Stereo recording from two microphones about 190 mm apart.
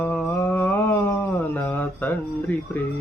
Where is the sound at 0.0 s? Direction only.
10° left (ahead or behind).